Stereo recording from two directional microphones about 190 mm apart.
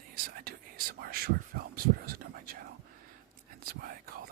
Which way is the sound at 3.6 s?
50° right (ahead or behind).